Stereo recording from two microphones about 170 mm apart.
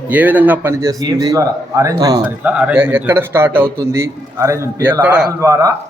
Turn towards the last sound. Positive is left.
turn(degrees=-20)  # may be behind; listen again after turning